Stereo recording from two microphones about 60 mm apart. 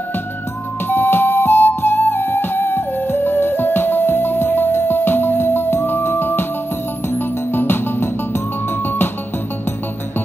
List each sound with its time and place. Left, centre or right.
0.8 s flute: left
7.1 s music: left